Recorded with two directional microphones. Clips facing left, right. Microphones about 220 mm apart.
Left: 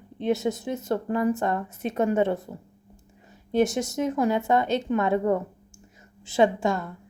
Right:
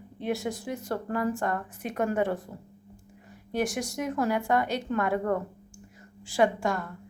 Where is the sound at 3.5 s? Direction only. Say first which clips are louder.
Left 6 dB; 25° left (ahead or behind).